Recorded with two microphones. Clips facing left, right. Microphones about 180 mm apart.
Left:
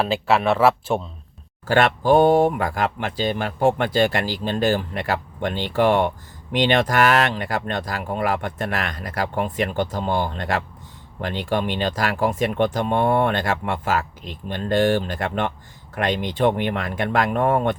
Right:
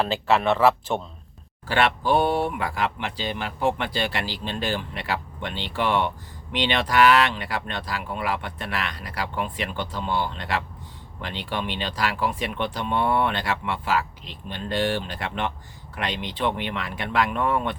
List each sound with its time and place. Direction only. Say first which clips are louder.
0.0 s speech: left 2 dB; 10° left (ahead or behind)
1.6 s speech: left 5 dB; 45° left (ahead or behind)